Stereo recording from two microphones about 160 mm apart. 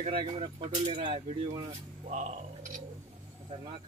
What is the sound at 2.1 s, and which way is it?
Speech, 50° right (ahead or behind).